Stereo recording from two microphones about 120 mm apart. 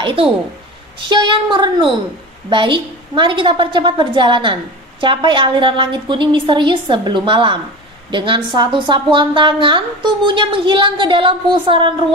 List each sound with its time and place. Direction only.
0.0 s a woman's voice: 50° right (ahead or behind)